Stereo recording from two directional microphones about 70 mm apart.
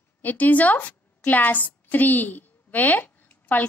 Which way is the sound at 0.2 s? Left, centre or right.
Left.